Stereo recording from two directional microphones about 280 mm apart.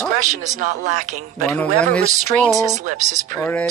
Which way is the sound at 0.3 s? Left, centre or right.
Right.